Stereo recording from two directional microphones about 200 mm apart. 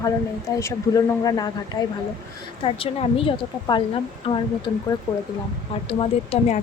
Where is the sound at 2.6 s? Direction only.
30° left (ahead or behind).